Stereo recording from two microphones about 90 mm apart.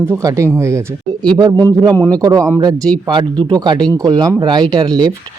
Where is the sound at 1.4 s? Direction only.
45° right (ahead or behind).